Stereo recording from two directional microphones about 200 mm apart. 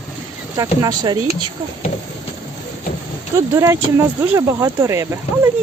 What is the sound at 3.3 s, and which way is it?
Speech, 15° right (ahead or behind).